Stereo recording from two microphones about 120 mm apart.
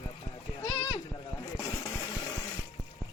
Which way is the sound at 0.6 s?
35° left (ahead or behind).